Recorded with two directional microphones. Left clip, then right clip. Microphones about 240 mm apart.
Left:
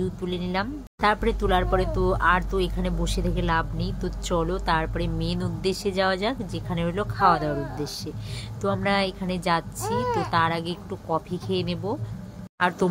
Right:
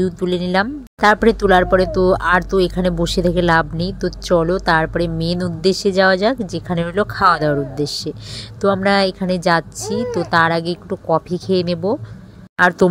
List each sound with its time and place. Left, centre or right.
0.0 s speech: right